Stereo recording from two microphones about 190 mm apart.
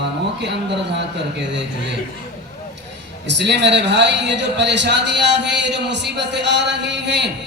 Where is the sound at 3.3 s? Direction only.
65° right (ahead or behind).